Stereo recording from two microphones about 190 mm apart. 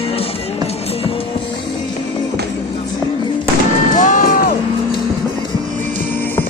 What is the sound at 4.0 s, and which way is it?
Music, 40° left (ahead or behind).